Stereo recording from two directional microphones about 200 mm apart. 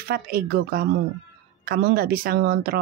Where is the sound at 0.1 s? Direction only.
50° right (ahead or behind).